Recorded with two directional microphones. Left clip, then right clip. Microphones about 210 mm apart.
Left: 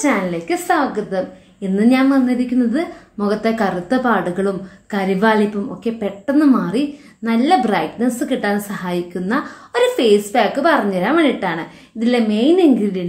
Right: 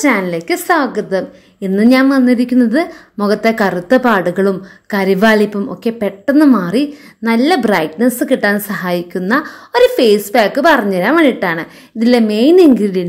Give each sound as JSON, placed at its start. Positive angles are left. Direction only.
{"t": 0.0, "sound": "a woman's voice", "side_deg": -45}